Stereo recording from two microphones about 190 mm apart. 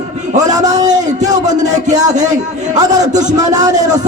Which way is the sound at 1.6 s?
40° right (ahead or behind).